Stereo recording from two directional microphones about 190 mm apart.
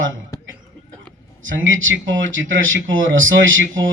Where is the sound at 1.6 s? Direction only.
90° right.